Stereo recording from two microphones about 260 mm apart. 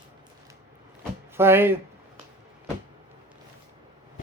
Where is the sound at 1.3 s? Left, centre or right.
Centre.